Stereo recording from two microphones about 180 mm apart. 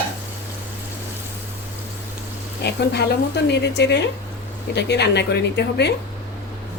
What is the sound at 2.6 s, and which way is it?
Speech, 70° left (ahead or behind).